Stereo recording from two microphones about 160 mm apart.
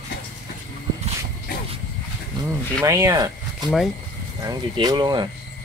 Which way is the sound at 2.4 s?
25° right (ahead or behind).